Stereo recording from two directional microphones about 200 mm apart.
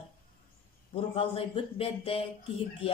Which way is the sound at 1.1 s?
30° left (ahead or behind).